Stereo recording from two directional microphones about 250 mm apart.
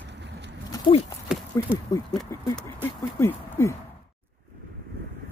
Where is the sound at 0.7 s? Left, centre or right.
Left.